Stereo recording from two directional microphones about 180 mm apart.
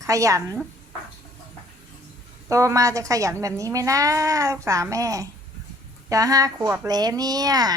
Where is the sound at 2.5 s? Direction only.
15° right (ahead or behind).